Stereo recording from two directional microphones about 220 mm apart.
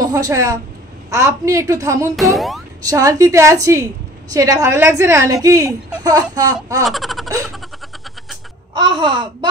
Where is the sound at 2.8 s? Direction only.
15° right (ahead or behind).